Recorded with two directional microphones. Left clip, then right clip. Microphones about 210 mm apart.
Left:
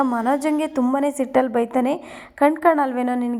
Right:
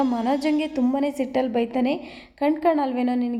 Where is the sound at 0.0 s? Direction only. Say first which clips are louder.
Left 3 dB; 15° left (ahead or behind).